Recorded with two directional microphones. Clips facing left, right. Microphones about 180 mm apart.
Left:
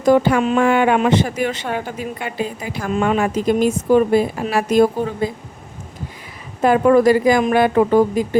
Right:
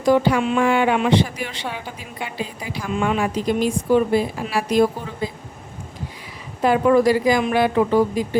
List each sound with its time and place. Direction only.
0.0 s a woman's voice: 50° left (ahead or behind)
6.6 s a woman's voice: 50° left (ahead or behind)